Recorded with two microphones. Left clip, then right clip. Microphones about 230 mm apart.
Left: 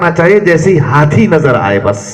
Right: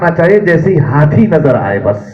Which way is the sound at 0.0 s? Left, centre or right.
Left.